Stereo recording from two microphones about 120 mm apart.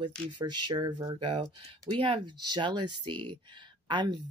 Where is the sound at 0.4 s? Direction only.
40° right (ahead or behind).